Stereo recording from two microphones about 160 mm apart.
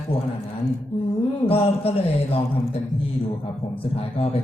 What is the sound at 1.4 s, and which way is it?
Speech, 40° left (ahead or behind).